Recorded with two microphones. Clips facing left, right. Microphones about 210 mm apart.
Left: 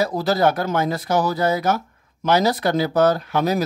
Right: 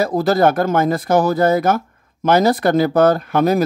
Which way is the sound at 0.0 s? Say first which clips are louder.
Right 4 dB; 50° right (ahead or behind).